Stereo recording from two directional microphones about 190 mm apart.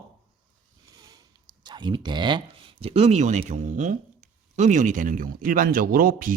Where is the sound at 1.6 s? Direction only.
25° right (ahead or behind).